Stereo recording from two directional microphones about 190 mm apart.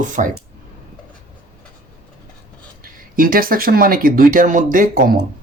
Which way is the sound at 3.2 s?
50° right (ahead or behind).